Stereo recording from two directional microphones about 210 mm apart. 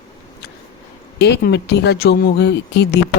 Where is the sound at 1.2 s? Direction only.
55° left (ahead or behind).